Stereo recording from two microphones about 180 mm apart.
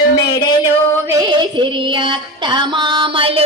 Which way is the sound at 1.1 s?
20° right (ahead or behind).